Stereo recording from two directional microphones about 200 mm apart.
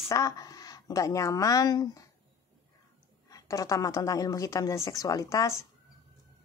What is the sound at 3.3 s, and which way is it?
A woman's voice, 15° left (ahead or behind).